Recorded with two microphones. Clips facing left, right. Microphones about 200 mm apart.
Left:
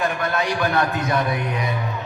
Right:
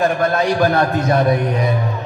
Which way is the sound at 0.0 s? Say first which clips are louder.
Right 7 dB; 35° right (ahead or behind).